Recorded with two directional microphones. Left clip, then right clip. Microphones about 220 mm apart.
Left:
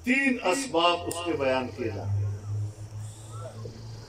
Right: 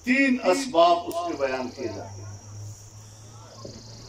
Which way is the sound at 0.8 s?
20° right (ahead or behind).